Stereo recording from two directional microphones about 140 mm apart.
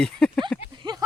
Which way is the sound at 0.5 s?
10° left (ahead or behind).